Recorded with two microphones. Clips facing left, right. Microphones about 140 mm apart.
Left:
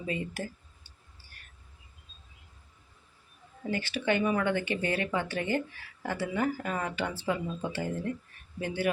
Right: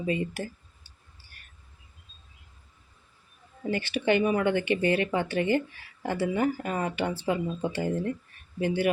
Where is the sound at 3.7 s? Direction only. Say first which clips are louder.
Right 4 dB; 15° right (ahead or behind).